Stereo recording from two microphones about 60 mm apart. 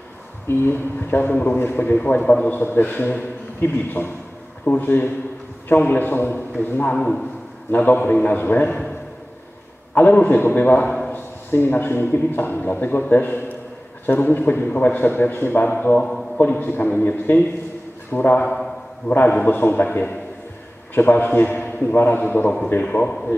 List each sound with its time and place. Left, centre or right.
0.5 s a man's voice: left
2.0 s a man's voice: left
2.5 s a man's voice: left
7.0 s a man's voice: centre
7.7 s a man's voice: left
9.9 s a man's voice: left
16.0 s a man's voice: centre
16.3 s a man's voice: left